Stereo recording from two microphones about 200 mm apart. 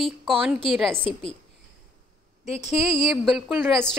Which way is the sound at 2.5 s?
35° left (ahead or behind).